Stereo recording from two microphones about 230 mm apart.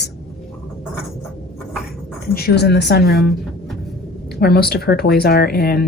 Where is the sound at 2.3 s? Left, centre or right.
Left.